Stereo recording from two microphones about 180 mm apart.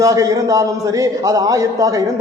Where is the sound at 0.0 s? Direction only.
20° right (ahead or behind).